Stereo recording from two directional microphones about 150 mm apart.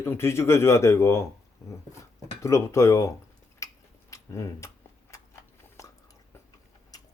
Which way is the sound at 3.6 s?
20° left (ahead or behind).